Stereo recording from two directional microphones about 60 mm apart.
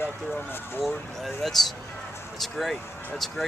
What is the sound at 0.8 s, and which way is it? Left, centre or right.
Speech, centre.